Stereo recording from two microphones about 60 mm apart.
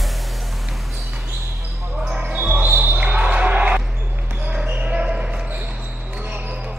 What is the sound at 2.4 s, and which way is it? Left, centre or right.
Basketball bounce, right.